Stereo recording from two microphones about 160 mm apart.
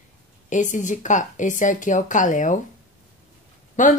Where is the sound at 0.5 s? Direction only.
50° left (ahead or behind).